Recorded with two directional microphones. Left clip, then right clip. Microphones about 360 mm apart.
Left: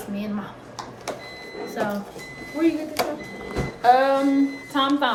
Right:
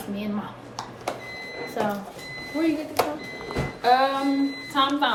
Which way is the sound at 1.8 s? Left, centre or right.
Centre.